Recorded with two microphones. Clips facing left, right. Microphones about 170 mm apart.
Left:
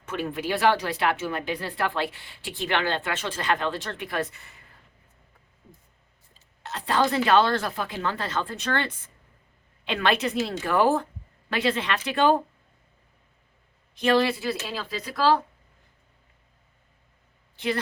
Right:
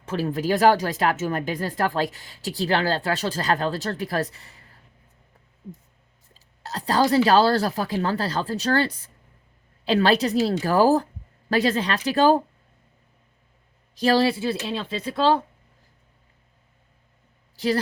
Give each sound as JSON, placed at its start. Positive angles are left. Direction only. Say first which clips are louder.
{"t": 0.0, "sound": "speech", "louder": "right 4 dB", "side_deg": -35}
{"t": 6.6, "sound": "speech", "louder": "right 3 dB", "side_deg": -40}
{"t": 13.9, "sound": "speech", "louder": "right 2 dB", "side_deg": -35}